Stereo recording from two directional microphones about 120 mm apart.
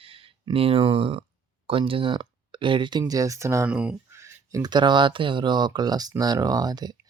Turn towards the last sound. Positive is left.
turn(degrees=-35)  # may be behind; listen again after turning